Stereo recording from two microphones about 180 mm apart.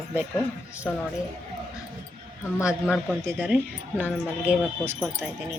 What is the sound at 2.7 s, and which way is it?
Speech, centre (ahead or behind).